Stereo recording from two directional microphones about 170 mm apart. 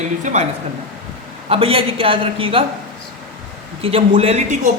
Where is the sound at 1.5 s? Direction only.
35° right (ahead or behind).